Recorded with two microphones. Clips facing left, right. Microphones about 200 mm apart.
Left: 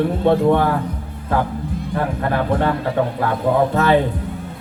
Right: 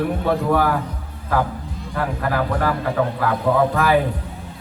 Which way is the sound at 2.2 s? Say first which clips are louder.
Left 2 dB; 25° left (ahead or behind).